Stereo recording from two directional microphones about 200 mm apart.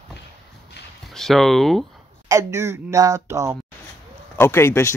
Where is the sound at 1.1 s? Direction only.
Centre (ahead or behind).